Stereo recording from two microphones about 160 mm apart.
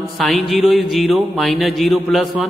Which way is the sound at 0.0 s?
Centre (ahead or behind).